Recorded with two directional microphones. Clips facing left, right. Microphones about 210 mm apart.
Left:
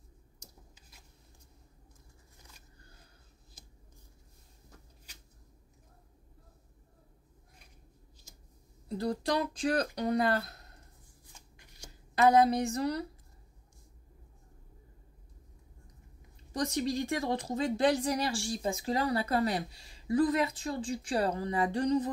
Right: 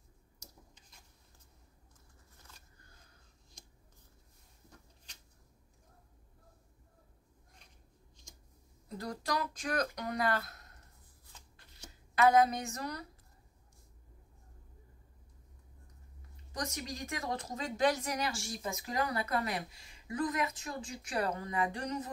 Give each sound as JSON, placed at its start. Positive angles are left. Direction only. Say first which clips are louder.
{"t": 3.6, "sound": "a sound", "louder": "left 1 dB", "side_deg": 5}
{"t": 8.8, "sound": "speech", "louder": "left 7 dB", "side_deg": 30}
{"t": 11.3, "sound": "shuffling cards", "louder": "even", "side_deg": 15}
{"t": 12.2, "sound": "speech", "louder": "left 3 dB", "side_deg": 35}
{"t": 16.5, "sound": "speech", "louder": "left 9 dB", "side_deg": 30}